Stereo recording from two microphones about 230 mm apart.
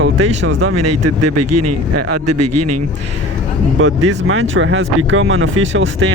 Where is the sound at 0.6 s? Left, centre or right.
Right.